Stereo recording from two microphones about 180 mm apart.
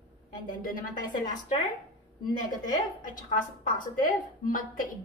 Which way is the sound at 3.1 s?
50° left (ahead or behind).